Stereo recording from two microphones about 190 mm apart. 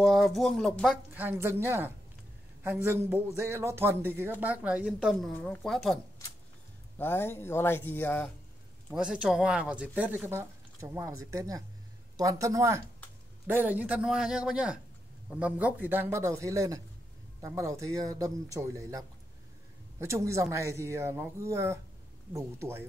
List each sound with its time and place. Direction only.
0.0 s a man's voice: centre (ahead or behind)
1.2 s speech: 10° right (ahead or behind)
5.3 s a man's voice: 10° left (ahead or behind)
7.0 s speech: 10° left (ahead or behind)
8.9 s a man's voice: 5° right (ahead or behind)